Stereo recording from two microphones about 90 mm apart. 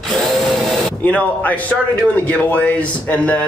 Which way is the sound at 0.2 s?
5° left (ahead or behind).